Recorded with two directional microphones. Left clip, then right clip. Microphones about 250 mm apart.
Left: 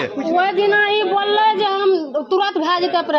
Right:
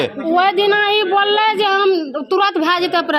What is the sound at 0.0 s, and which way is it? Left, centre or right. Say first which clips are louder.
Speech: right 3 dB; right.